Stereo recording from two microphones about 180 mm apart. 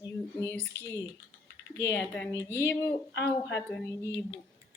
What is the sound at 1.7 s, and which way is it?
Speech, 15° left (ahead or behind).